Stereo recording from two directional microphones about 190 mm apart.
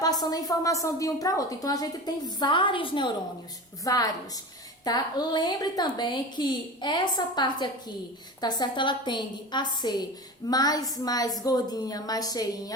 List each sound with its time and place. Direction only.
0.0 s a woman's voice: 20° left (ahead or behind)